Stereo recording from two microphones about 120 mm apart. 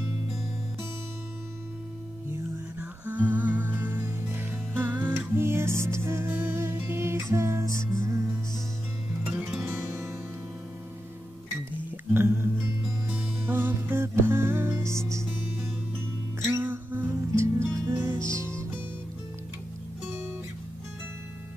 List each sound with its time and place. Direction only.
2.8 s music: 15° right (ahead or behind)
9.7 s music: 20° right (ahead or behind)
12.1 s music: 20° right (ahead or behind)